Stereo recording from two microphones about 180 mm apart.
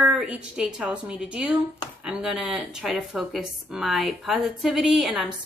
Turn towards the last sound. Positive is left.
turn(degrees=0)  # may be behind; listen again after turning